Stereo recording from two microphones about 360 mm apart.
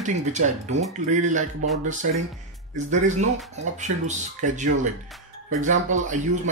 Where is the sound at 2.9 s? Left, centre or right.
Centre.